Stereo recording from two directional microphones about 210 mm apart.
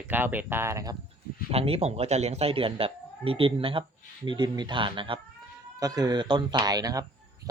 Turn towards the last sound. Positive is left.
turn(degrees=-20)  # may be behind; listen again after turning